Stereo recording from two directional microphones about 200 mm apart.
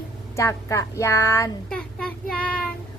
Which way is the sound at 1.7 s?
5° left (ahead or behind).